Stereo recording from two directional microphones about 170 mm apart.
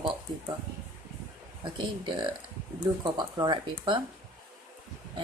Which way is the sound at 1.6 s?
30° right (ahead or behind).